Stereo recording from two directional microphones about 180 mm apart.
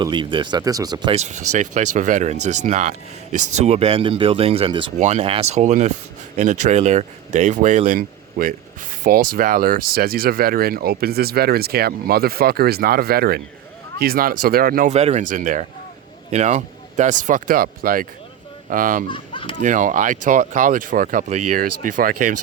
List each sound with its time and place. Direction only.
0.0 s speech: 25° right (ahead or behind)
1.2 s speech: 40° right (ahead or behind)
4.9 s speech: 40° right (ahead or behind)
14.8 s speech: 40° right (ahead or behind)
19.0 s speech: 25° left (ahead or behind)
19.6 s speech: 45° right (ahead or behind)